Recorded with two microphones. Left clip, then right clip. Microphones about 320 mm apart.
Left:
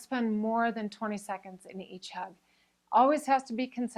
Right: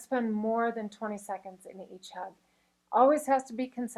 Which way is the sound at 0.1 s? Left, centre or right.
Left.